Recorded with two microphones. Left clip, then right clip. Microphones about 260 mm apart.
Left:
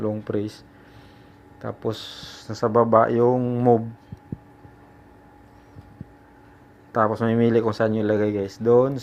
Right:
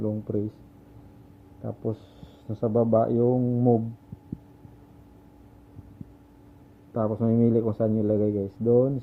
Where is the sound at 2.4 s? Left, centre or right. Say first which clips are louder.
Left 5 dB; left.